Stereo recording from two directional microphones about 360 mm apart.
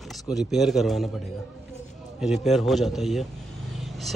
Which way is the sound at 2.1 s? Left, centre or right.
Centre.